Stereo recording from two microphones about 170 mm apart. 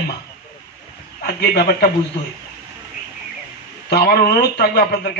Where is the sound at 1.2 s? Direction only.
70° left (ahead or behind).